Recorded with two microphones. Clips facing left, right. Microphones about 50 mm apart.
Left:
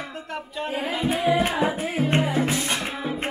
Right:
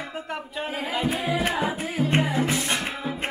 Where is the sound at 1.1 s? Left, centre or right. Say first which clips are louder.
Left 6 dB; left.